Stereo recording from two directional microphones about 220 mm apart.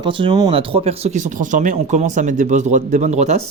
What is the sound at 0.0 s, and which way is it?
Speech, 20° right (ahead or behind).